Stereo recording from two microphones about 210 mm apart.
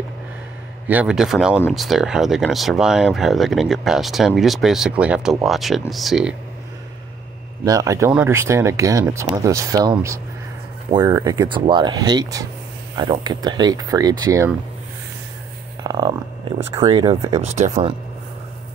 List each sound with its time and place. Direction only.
0.8 s speech: 5° right (ahead or behind)
7.6 s speech: 15° right (ahead or behind)
15.8 s speech: 20° right (ahead or behind)